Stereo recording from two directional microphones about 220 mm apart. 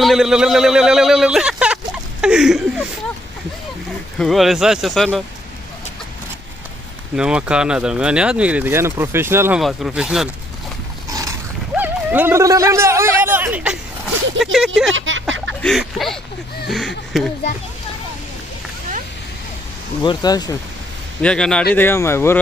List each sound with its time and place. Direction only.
0.0 s speech: centre (ahead or behind)
2.2 s a sound: 5° right (ahead or behind)
4.2 s speech: centre (ahead or behind)
7.2 s speech: 5° right (ahead or behind)
11.1 s dog: 15° right (ahead or behind)
14.4 s speech: centre (ahead or behind)
14.9 s a sound: 60° right (ahead or behind)
15.6 s speech: centre (ahead or behind)
20.0 s speech: 20° left (ahead or behind)
21.2 s speech: 5° left (ahead or behind)